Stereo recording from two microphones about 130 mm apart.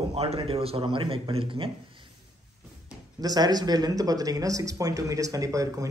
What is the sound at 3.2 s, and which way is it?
A man's voice, 30° right (ahead or behind).